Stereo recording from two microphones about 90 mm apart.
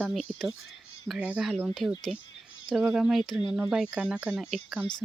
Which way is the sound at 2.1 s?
Centre (ahead or behind).